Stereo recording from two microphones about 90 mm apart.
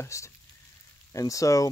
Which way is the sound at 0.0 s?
35° left (ahead or behind).